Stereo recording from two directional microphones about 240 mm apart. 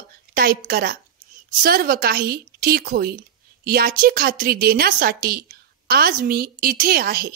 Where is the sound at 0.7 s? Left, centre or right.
Right.